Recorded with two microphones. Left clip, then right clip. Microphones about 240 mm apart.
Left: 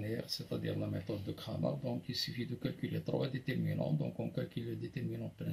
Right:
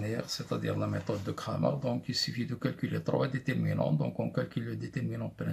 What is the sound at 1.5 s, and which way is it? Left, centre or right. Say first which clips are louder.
Speech: right 7 dB; right.